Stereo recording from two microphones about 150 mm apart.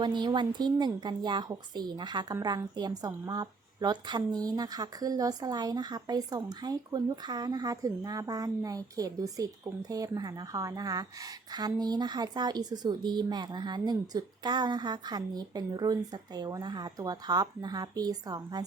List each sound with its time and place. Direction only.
0.0 s a woman's voice: 30° right (ahead or behind)